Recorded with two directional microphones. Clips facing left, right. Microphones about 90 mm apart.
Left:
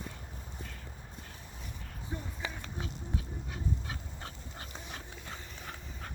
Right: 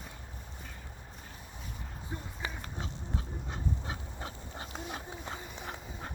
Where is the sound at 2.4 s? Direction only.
25° right (ahead or behind).